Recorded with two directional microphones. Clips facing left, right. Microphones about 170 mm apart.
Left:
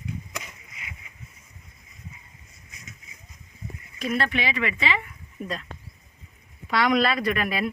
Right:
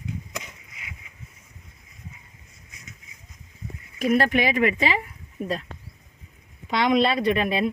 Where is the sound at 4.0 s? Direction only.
45° right (ahead or behind).